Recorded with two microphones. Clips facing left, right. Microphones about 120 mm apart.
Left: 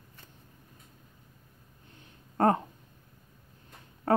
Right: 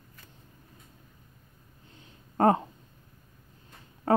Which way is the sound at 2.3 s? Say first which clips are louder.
Right 2 dB; 15° right (ahead or behind).